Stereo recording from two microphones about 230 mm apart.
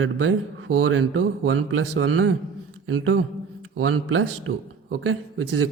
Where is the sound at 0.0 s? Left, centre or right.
Right.